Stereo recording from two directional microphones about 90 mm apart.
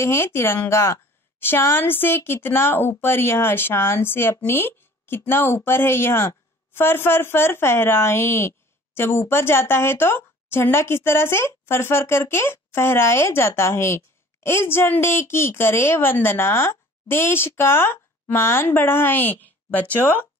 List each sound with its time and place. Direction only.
0.0 s a woman's voice: 30° left (ahead or behind)